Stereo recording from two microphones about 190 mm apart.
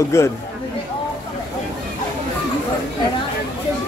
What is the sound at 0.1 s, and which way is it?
Speech, 15° left (ahead or behind).